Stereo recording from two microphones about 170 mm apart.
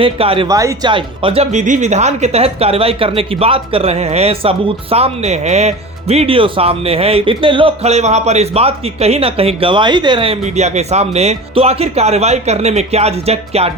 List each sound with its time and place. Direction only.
0.0 s speech: 30° right (ahead or behind)
0.4 s speech: 20° right (ahead or behind); by 13.7 s 35° right (ahead or behind)